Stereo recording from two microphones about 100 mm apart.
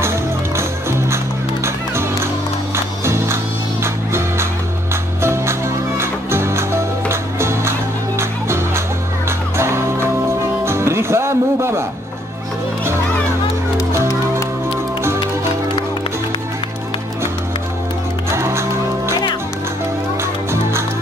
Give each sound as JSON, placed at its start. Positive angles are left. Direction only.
{"t": 0.6, "sound": "music", "side_deg": -25}
{"t": 18.3, "sound": "music", "side_deg": -25}